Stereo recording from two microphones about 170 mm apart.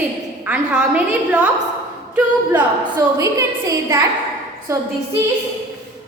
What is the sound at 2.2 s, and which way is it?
A woman's voice, 10° right (ahead or behind).